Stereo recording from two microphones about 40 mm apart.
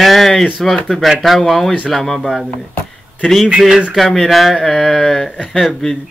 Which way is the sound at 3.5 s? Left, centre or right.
Centre.